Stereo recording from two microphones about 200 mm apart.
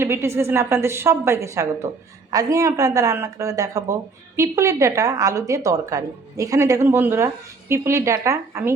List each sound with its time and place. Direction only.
0.0 s a woman's voice: 15° right (ahead or behind)